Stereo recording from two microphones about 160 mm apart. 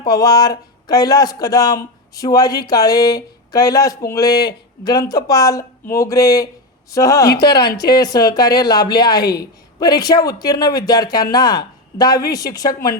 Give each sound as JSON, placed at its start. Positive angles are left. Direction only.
{"t": 0.0, "sound": "a woman's voice", "side_deg": 25}
{"t": 7.5, "sound": "speech", "side_deg": 90}
{"t": 7.9, "sound": "a woman's voice", "side_deg": 25}